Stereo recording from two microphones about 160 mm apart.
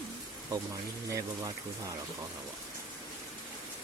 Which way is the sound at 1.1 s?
20° right (ahead or behind).